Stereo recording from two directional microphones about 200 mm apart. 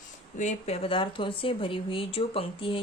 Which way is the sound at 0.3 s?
35° left (ahead or behind).